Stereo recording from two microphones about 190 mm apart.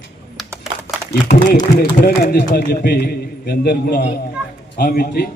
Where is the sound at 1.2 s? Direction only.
40° left (ahead or behind).